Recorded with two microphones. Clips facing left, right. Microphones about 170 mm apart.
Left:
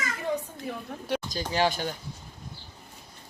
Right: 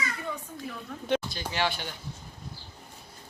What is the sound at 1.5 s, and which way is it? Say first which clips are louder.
Speech: left 5 dB; 40° left (ahead or behind).